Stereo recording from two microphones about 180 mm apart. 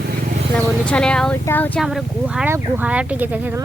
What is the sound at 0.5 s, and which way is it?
Speech, 5° left (ahead or behind).